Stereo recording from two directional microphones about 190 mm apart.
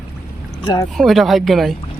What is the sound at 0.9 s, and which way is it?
Speech, centre (ahead or behind).